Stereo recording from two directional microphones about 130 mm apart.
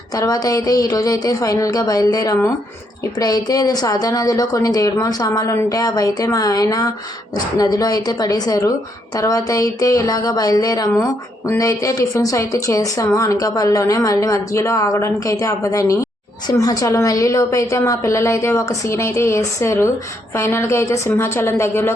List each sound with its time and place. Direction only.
0.1 s a woman's voice: 30° left (ahead or behind)